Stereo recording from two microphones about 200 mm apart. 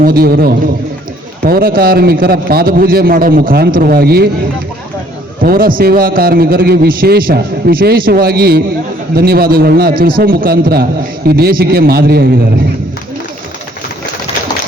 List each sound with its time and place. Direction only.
0.0 s a man's voice: 50° right (ahead or behind)
5.4 s a man's voice: 45° right (ahead or behind)